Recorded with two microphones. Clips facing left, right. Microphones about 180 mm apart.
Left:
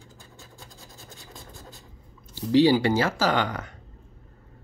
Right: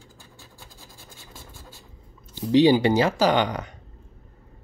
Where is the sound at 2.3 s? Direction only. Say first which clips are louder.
Right 2 dB; 20° right (ahead or behind).